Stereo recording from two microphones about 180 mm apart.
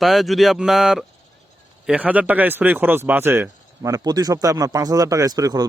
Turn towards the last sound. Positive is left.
turn(degrees=-20)  # may be behind; listen again after turning